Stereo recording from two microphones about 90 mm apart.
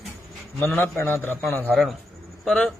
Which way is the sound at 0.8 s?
25° left (ahead or behind).